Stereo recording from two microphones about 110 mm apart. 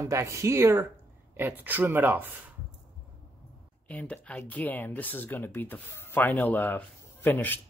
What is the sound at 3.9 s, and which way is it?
Speech, 10° left (ahead or behind).